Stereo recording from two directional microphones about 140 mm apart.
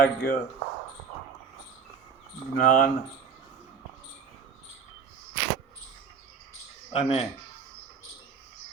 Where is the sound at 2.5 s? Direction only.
85° left.